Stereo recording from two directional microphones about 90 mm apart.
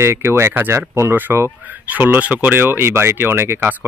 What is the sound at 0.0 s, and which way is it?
Speech, 30° right (ahead or behind).